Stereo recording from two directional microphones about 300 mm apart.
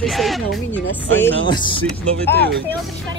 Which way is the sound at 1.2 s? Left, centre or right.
Centre.